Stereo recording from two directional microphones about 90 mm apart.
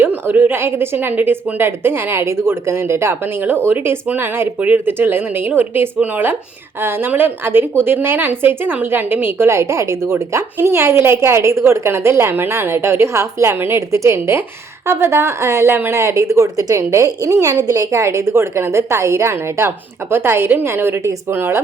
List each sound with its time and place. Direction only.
0.0 s a woman's voice: 20° right (ahead or behind)